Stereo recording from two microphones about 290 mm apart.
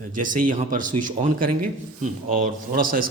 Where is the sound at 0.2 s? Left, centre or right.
Right.